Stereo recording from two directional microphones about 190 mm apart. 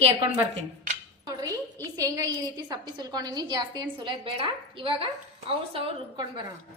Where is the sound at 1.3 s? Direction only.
20° right (ahead or behind).